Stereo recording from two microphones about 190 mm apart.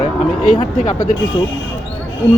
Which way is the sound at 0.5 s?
25° left (ahead or behind).